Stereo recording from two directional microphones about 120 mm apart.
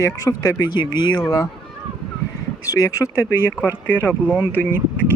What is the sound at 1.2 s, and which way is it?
Speech, 30° left (ahead or behind).